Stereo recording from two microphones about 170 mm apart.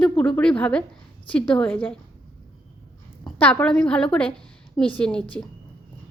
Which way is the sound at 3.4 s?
10° left (ahead or behind).